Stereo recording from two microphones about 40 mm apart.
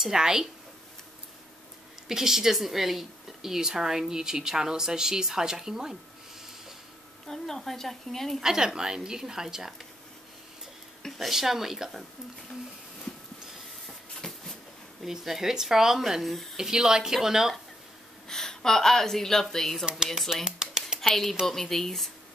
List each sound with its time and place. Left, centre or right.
0.0 s a woman's voice: centre
2.0 s a woman's voice: centre
7.2 s a woman's voice: centre
8.4 s a woman's voice: centre
11.0 s speech: centre
14.2 s a sound: centre
15.0 s a woman's voice: centre
16.2 s speech: centre
16.5 s a woman's voice: centre
18.3 s a woman's voice: centre
20.4 s a sound: centre
21.0 s a woman's voice: centre